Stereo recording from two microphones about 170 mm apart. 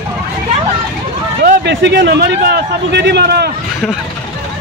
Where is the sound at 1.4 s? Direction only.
85° right.